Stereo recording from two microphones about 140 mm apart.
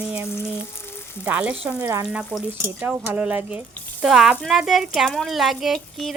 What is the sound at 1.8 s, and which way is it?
Frying, 20° right (ahead or behind).